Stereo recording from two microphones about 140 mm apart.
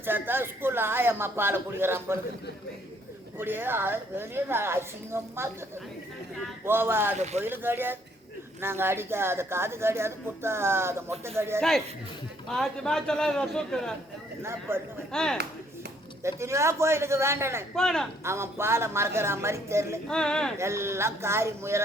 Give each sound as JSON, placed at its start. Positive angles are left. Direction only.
{"t": 0.0, "sound": "speech", "side_deg": -15}
{"t": 3.3, "sound": "speech", "side_deg": -15}
{"t": 6.7, "sound": "speech", "side_deg": -15}
{"t": 7.2, "sound": "speech", "side_deg": -55}
{"t": 7.4, "sound": "speech", "side_deg": -15}
{"t": 12.5, "sound": "a man's voice", "side_deg": 5}
{"t": 14.7, "sound": "speech", "side_deg": -15}
{"t": 15.1, "sound": "a man's voice", "side_deg": 5}
{"t": 16.2, "sound": "a woman's voice", "side_deg": -20}
{"t": 17.7, "sound": "a man's voice", "side_deg": 5}
{"t": 18.2, "sound": "a woman's voice", "side_deg": -20}
{"t": 20.1, "sound": "a man's voice", "side_deg": 5}
{"t": 20.6, "sound": "a woman's voice", "side_deg": -20}